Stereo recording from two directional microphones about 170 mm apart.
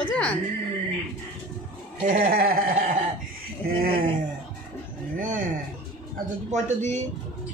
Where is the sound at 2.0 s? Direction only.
55° right (ahead or behind).